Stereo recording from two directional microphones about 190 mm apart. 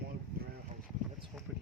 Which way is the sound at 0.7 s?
40° right (ahead or behind).